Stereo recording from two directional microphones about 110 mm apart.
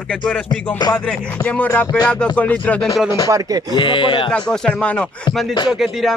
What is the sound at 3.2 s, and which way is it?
Speech, 30° right (ahead or behind).